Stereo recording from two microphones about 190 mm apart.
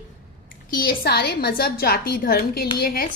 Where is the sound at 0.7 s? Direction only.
50° left (ahead or behind).